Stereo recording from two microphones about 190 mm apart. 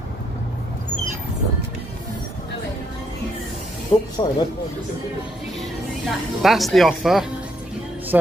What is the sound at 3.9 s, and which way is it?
Speech, 30° left (ahead or behind).